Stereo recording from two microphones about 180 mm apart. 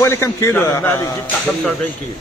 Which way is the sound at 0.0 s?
15° left (ahead or behind).